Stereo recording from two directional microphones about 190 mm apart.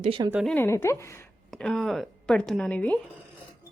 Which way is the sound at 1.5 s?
5° left (ahead or behind).